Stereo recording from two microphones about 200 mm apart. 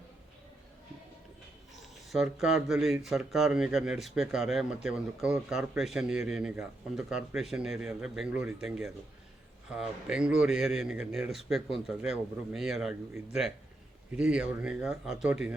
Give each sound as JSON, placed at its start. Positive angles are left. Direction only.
{"t": 2.1, "sound": "speech", "side_deg": 0}
{"t": 14.2, "sound": "speech", "side_deg": -5}